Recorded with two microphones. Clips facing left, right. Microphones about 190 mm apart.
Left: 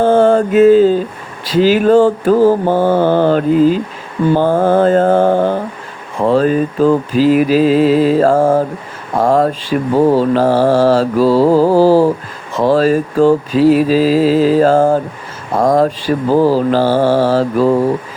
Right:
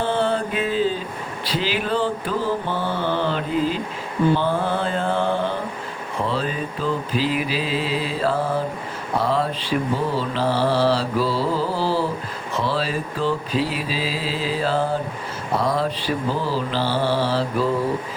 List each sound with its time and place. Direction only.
0.0 s mantra: 45° left (ahead or behind)